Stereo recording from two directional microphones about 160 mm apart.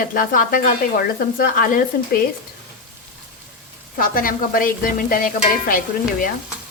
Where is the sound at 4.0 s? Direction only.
60° left (ahead or behind).